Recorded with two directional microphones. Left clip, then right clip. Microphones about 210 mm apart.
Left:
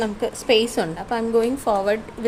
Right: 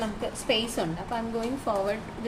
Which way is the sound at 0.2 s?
55° left (ahead or behind).